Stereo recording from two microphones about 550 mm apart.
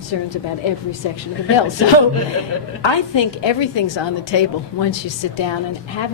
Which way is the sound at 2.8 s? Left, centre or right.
Left.